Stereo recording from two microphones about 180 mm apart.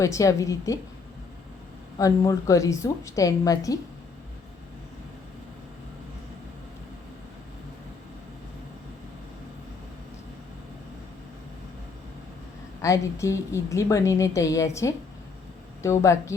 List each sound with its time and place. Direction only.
0.0 s a woman's voice: 15° left (ahead or behind)
2.0 s a woman's voice: 20° left (ahead or behind)
12.8 s a woman's voice: 15° left (ahead or behind)